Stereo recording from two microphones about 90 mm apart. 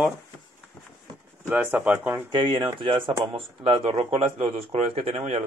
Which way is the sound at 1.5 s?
20° right (ahead or behind).